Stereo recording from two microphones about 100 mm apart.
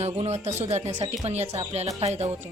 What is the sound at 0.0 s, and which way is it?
Speech, 90° right.